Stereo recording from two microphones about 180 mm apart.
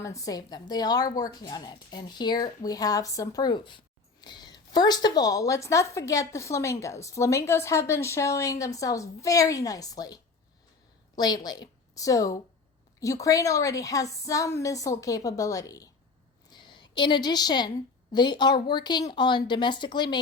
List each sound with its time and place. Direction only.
0.0 s a woman's voice: 15° left (ahead or behind)
11.2 s a woman's voice: 20° left (ahead or behind)
16.5 s a sound: 25° left (ahead or behind)
18.1 s a woman's voice: 25° left (ahead or behind)